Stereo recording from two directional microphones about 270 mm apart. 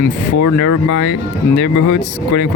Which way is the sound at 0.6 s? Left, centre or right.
Left.